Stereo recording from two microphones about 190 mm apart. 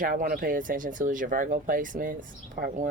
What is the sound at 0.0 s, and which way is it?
Speech, 45° right (ahead or behind).